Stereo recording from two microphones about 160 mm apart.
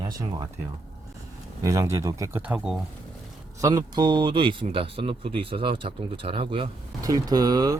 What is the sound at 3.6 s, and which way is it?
Speech, 20° right (ahead or behind).